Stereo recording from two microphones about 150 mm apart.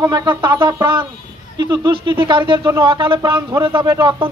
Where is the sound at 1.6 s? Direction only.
30° right (ahead or behind).